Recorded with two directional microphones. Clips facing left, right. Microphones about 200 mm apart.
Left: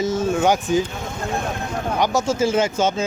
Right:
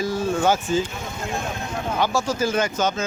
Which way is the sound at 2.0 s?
20° left (ahead or behind).